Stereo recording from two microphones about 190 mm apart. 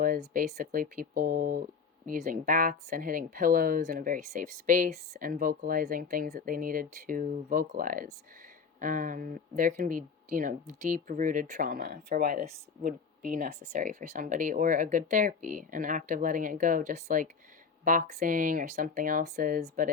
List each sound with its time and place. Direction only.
0.0 s speech: 45° right (ahead or behind)